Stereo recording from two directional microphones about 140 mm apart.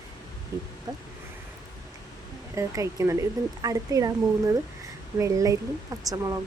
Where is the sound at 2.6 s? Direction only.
20° right (ahead or behind).